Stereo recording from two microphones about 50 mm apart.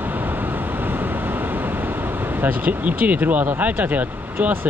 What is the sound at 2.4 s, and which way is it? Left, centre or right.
Speech, right.